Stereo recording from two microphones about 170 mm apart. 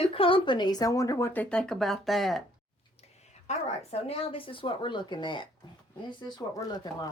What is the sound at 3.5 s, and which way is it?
Speech, 40° left (ahead or behind).